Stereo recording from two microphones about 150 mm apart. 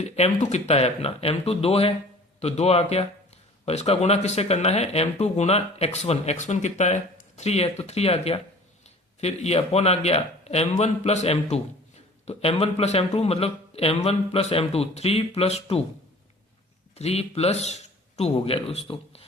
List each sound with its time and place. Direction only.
0.0 s speech: 45° left (ahead or behind)
16.9 s a man's voice: 45° left (ahead or behind)